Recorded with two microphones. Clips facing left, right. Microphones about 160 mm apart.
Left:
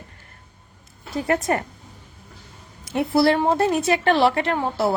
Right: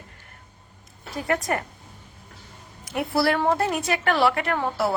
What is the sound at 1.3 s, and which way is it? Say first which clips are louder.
Speech: left 3 dB; 25° left (ahead or behind).